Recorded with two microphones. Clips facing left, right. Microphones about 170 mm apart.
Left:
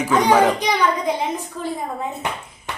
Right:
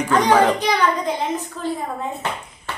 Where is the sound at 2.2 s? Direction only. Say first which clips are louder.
Right 1 dB; 15° left (ahead or behind).